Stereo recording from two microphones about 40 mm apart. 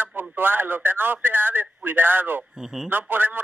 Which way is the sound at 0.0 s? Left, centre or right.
Right.